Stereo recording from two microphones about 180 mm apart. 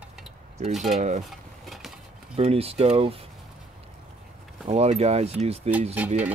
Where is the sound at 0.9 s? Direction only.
40° right (ahead or behind).